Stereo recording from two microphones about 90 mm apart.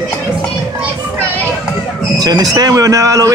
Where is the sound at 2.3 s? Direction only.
45° right (ahead or behind).